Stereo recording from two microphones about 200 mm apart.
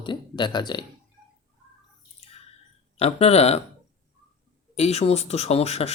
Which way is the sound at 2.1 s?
30° left (ahead or behind).